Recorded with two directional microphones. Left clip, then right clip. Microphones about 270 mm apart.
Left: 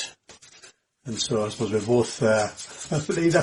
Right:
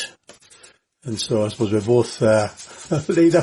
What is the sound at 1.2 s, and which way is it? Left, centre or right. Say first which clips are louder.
Speech: right 6 dB; right.